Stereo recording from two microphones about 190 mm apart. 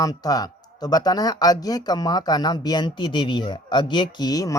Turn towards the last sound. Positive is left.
turn(degrees=20)  # may be behind; listen again after turning